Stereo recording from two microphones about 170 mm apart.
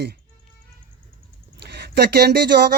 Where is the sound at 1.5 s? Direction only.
75° right (ahead or behind).